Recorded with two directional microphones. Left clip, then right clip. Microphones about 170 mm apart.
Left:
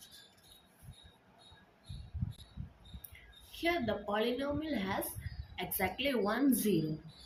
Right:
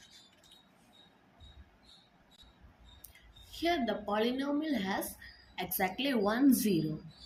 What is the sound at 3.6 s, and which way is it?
A woman's voice, 25° right (ahead or behind).